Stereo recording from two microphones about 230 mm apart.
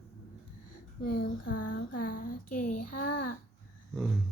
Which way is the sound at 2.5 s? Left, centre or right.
Left.